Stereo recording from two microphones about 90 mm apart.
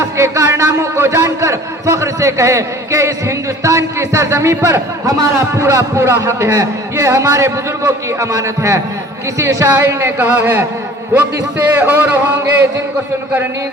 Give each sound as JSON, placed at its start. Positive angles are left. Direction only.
{"t": 0.2, "sound": "a man's voice", "side_deg": -35}